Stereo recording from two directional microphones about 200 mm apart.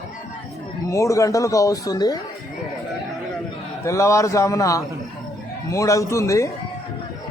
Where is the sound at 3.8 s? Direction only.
15° left (ahead or behind).